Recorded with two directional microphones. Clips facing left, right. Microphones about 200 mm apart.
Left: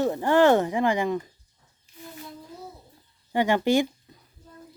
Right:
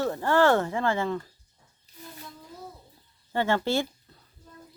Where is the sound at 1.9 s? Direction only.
35° right (ahead or behind).